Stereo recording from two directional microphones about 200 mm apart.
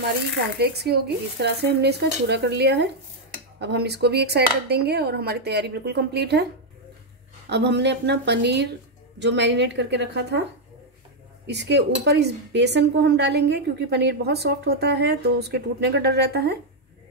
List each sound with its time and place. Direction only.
0.6 s speech: 55° right (ahead or behind)
7.4 s speech: 60° right (ahead or behind)
11.4 s speech: 60° right (ahead or behind)